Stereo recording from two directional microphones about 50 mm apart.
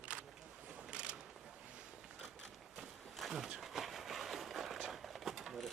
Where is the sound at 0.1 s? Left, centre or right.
Right.